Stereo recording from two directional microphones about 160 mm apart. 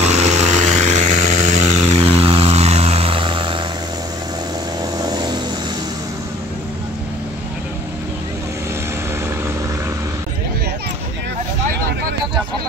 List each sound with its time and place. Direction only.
0.0 s vehicle: 45° right (ahead or behind)
5.0 s vehicle: 25° right (ahead or behind)